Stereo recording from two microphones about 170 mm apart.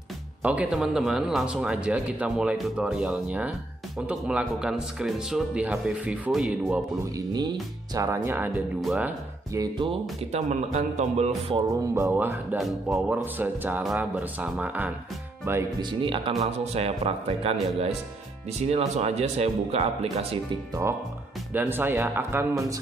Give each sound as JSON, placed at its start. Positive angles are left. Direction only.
{"t": 0.4, "sound": "speech", "side_deg": -10}
{"t": 7.2, "sound": "speech", "side_deg": -20}
{"t": 9.5, "sound": "speech", "side_deg": -20}
{"t": 9.8, "sound": "speech", "side_deg": -40}
{"t": 11.7, "sound": "speech", "side_deg": -15}
{"t": 15.8, "sound": "speech", "side_deg": -30}
{"t": 18.6, "sound": "speech", "side_deg": -40}
{"t": 21.5, "sound": "speech", "side_deg": -10}